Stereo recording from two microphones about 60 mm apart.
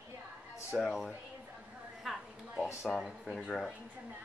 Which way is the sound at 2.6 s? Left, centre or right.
Left.